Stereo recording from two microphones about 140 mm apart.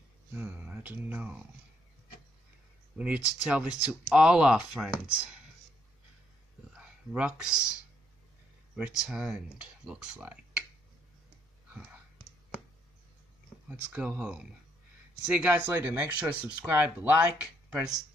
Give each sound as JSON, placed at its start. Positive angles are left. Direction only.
{"t": 0.3, "sound": "speech", "side_deg": -10}
{"t": 3.0, "sound": "speech", "side_deg": -10}
{"t": 6.8, "sound": "speech", "side_deg": -5}
{"t": 8.7, "sound": "speech", "side_deg": -5}
{"t": 13.7, "sound": "speech", "side_deg": -10}